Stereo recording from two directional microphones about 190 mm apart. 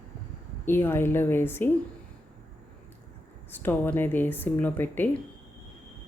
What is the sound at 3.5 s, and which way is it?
Speech, 10° left (ahead or behind).